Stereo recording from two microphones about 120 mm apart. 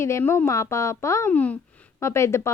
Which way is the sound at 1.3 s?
15° left (ahead or behind).